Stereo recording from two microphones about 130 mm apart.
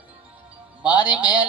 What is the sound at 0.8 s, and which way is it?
Music, 10° right (ahead or behind).